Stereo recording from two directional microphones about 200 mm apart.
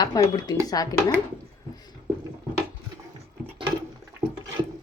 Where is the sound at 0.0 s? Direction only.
20° left (ahead or behind).